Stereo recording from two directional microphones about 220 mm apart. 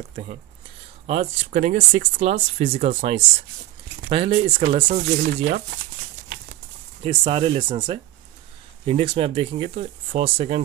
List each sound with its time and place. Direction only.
0.1 s speech: 30° right (ahead or behind)
4.8 s speech: 40° right (ahead or behind)
7.0 s speech: 25° right (ahead or behind)